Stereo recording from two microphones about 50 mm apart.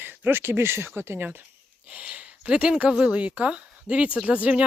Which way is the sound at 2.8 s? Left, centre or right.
Right.